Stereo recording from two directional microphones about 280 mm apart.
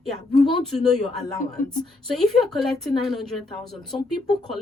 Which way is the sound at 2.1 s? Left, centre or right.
Centre.